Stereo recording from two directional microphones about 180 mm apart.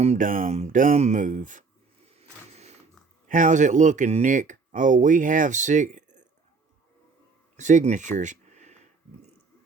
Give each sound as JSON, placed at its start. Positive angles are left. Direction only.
{"t": 0.0, "sound": "speech", "side_deg": -40}
{"t": 3.2, "sound": "speech", "side_deg": -45}
{"t": 7.5, "sound": "speech", "side_deg": -45}
{"t": 8.2, "sound": "a sound", "side_deg": -40}